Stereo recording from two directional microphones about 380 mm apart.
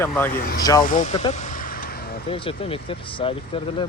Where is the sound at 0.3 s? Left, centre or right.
Left.